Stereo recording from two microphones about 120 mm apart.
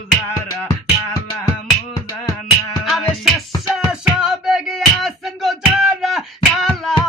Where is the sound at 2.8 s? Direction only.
Centre (ahead or behind).